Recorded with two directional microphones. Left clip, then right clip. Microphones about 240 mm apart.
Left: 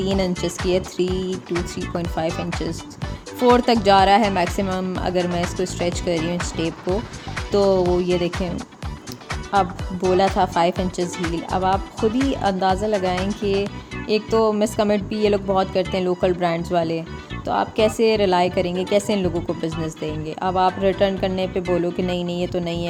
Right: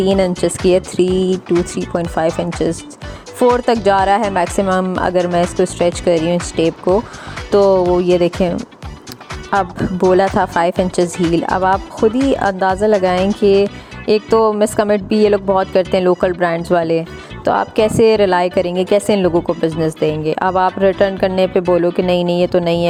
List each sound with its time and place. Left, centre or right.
0.0 s speech: right